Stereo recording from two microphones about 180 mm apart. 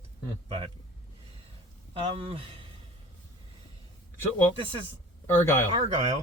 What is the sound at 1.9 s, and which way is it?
Speech, 30° right (ahead or behind).